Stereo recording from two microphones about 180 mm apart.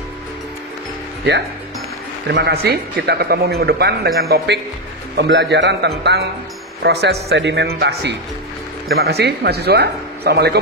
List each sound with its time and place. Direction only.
2.2 s a man's voice: 70° right (ahead or behind)
5.1 s a man's voice: 75° right (ahead or behind)
7.2 s a man's voice: 75° right (ahead or behind)